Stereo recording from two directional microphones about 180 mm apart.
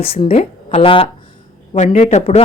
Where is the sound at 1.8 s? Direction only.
40° left (ahead or behind).